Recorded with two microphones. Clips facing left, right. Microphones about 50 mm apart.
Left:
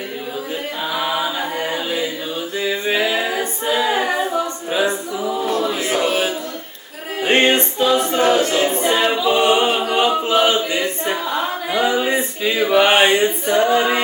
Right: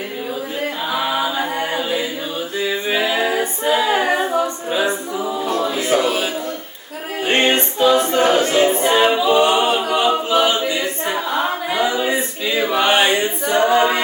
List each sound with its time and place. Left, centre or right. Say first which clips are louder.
0.9 s a capella: right 1 dB; centre
4.0 s a capella: right 2 dB; centre
6.1 s a sound: left 1 dB; centre
7.3 s music: left 2 dB; centre
8.0 s a capella: even; centre
8.7 s a capella: right 2 dB; centre
9.3 s a capella: right 1 dB; centre
10.2 s choir: even; centre
11.8 s male singing: left 2 dB; centre
13.1 s a capella: left 2 dB; centre